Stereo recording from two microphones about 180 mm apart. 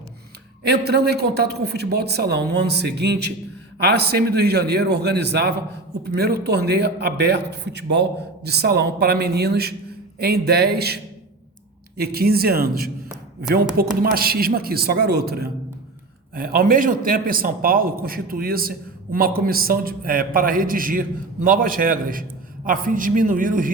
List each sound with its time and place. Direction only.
0.6 s a man's voice: 65° right (ahead or behind)
14.0 s a man's voice: 55° right (ahead or behind)